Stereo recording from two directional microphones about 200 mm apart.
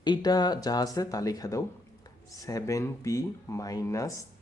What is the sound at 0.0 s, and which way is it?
Speech, 20° left (ahead or behind).